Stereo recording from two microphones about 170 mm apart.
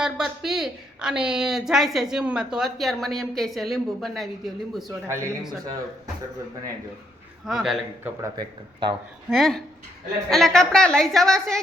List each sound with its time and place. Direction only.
0.0 s a woman's voice: 5° right (ahead or behind)
4.9 s speech: 15° right (ahead or behind)
7.4 s a woman's voice: centre (ahead or behind)
8.2 s speech: 25° right (ahead or behind)
9.3 s a woman's voice: centre (ahead or behind)